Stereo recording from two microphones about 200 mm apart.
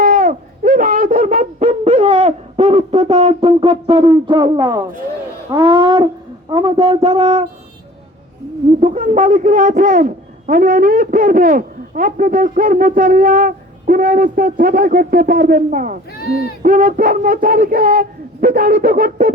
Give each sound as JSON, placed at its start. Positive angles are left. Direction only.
{"t": 0.0, "sound": "owl", "side_deg": -45}
{"t": 5.5, "sound": "speech", "side_deg": -25}
{"t": 8.8, "sound": "speech", "side_deg": -35}
{"t": 16.1, "sound": "speech", "side_deg": 50}
{"t": 16.6, "sound": "speech", "side_deg": -45}